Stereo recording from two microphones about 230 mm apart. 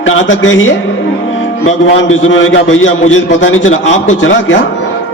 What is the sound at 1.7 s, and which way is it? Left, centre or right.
A man's voice, left.